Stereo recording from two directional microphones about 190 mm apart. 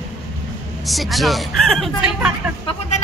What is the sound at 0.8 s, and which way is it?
Speech, centre (ahead or behind).